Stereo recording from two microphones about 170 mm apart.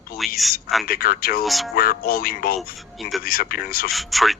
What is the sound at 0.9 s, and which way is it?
A man's voice, 60° left (ahead or behind).